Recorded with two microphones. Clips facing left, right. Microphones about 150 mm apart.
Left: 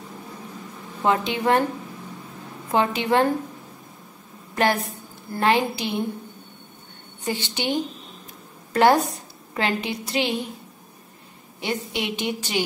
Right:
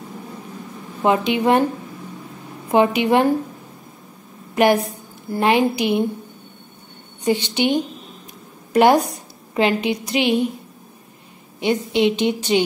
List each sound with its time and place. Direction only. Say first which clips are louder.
1.0 s a woman's voice: right 4 dB; 15° right (ahead or behind)
2.7 s a woman's voice: right 5 dB; 15° right (ahead or behind)
5.3 s a woman's voice: right 4 dB; 15° right (ahead or behind)
7.2 s a woman's voice: right 8 dB; 20° right (ahead or behind)
11.6 s a woman's voice: right 10 dB; 20° right (ahead or behind)